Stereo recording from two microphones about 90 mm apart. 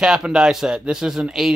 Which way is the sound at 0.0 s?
5° right (ahead or behind).